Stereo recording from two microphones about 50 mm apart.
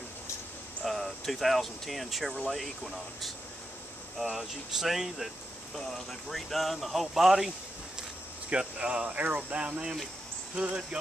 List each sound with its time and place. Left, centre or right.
0.8 s speech: centre
8.5 s speech: right